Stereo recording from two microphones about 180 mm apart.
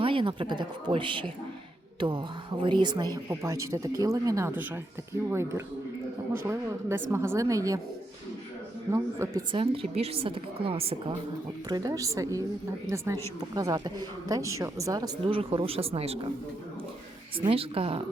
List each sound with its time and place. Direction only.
0.0 s a woman's voice: 30° right (ahead or behind)
8.9 s speech: 15° right (ahead or behind)
9.5 s a woman's voice: 30° right (ahead or behind)
11.7 s a woman's voice: 20° right (ahead or behind)
15.4 s a woman's voice: 30° right (ahead or behind)
17.3 s a woman's voice: 30° right (ahead or behind)